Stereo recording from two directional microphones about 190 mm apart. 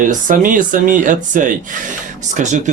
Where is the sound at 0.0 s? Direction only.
45° right (ahead or behind).